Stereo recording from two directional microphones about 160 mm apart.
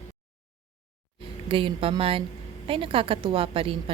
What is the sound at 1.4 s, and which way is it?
A woman's voice, 35° right (ahead or behind).